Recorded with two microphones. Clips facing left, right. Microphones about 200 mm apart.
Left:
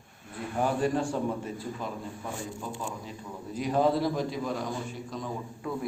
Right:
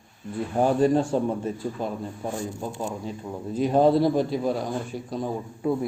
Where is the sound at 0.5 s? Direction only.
30° right (ahead or behind).